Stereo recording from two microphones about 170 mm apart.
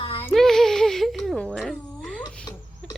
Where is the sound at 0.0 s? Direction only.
30° left (ahead or behind).